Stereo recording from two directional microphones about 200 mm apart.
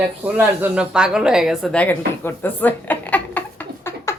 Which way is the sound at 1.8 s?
10° left (ahead or behind).